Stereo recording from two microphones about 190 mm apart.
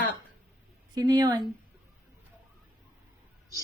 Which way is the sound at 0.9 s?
20° right (ahead or behind).